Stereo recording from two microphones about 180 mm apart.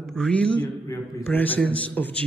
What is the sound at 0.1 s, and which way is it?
A man's voice, 5° left (ahead or behind).